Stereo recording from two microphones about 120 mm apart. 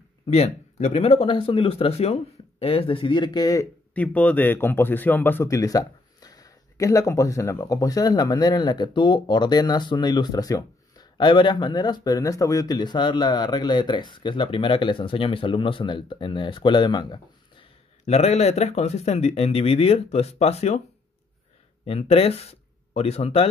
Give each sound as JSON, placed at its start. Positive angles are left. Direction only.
{"t": 0.3, "sound": "speech", "side_deg": 65}
{"t": 3.9, "sound": "a man's voice", "side_deg": 10}
{"t": 18.0, "sound": "speech", "side_deg": 65}
{"t": 21.8, "sound": "speech", "side_deg": 55}